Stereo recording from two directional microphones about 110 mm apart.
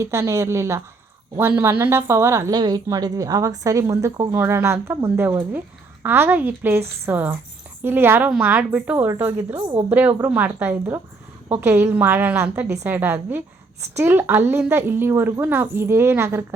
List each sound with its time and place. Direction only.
0.0 s a woman's voice: 25° right (ahead or behind)
2.5 s a woman's voice: 40° right (ahead or behind); by 16.6 s 25° right (ahead or behind)